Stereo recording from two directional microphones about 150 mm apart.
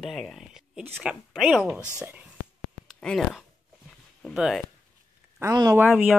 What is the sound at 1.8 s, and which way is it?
Speech, 15° left (ahead or behind).